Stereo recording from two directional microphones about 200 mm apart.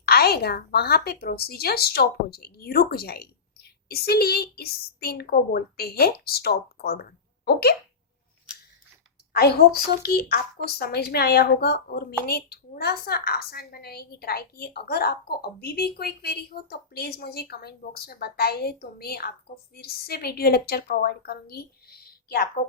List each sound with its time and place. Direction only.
0.0 s a woman's voice: 50° left (ahead or behind)
9.3 s a woman's voice: 50° left (ahead or behind)